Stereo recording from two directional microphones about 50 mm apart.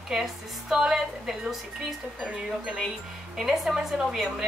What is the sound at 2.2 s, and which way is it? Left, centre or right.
Speech, centre.